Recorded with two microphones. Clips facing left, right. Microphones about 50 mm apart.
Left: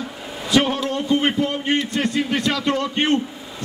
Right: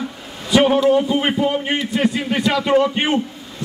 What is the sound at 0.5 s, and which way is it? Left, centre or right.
A man's voice, centre.